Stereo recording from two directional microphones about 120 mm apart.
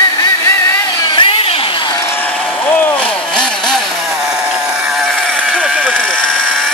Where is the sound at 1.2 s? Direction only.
50° left (ahead or behind).